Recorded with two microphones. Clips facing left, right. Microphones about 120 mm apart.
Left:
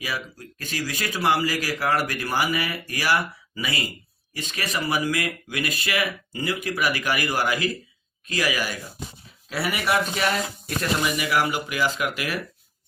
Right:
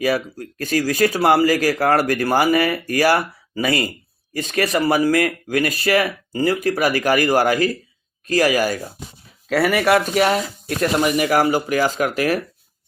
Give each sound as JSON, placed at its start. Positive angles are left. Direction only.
{"t": 0.0, "sound": "speech", "side_deg": -45}
{"t": 10.2, "sound": "speech", "side_deg": -40}